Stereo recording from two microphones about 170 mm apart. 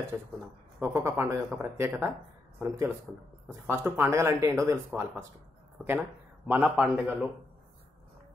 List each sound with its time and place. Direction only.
0.7 s a man's voice: 15° right (ahead or behind)